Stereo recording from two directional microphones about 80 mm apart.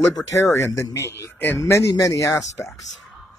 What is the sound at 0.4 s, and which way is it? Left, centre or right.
Speech, left.